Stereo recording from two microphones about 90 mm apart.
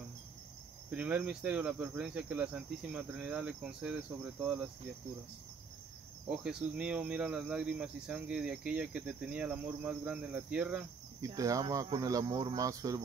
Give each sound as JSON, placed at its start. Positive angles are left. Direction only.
{"t": 0.8, "sound": "speech", "side_deg": -15}
{"t": 6.3, "sound": "speech", "side_deg": -5}
{"t": 11.1, "sound": "speech", "side_deg": -40}